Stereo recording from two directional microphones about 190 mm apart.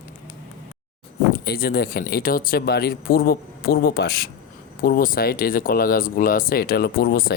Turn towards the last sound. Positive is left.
turn(degrees=55)  # may be behind; listen again after turning